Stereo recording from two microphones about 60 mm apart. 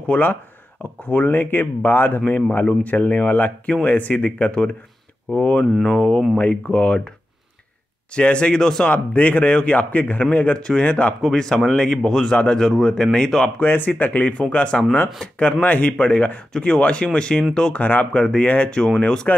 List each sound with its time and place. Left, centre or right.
1.0 s speech: left
6.3 s speech: left
8.1 s speech: centre
8.8 s speech: left
11.2 s speech: centre
13.6 s speech: left